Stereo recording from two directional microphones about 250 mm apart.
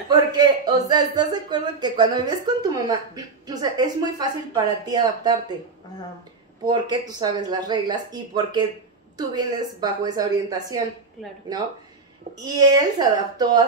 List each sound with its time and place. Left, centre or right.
0.1 s a man's voice: centre
6.6 s a man's voice: centre